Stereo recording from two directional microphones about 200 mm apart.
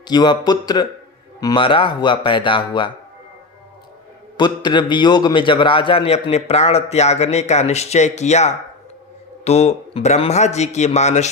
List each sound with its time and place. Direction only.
0.1 s a man's voice: 20° left (ahead or behind)
4.4 s a man's voice: 20° left (ahead or behind)